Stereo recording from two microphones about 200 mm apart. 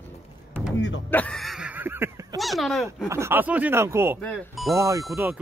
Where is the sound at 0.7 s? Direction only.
65° left (ahead or behind).